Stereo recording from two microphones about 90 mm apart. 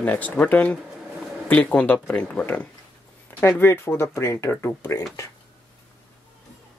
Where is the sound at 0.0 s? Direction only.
20° left (ahead or behind).